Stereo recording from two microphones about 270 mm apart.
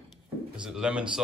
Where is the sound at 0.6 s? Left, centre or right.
Centre.